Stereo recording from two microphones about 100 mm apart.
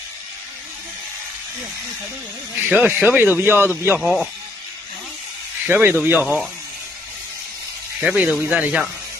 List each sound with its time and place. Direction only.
2.7 s speech: 15° right (ahead or behind)
4.0 s speech: centre (ahead or behind)
5.7 s speech: 20° right (ahead or behind)
8.0 s speech: 10° right (ahead or behind)